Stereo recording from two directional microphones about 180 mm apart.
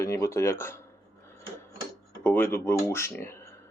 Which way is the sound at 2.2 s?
10° left (ahead or behind).